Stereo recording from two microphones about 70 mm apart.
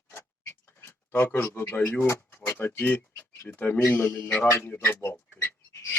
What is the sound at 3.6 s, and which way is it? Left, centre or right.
A man's voice, left.